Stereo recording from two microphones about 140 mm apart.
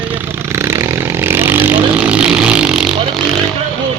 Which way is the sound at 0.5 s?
20° right (ahead or behind).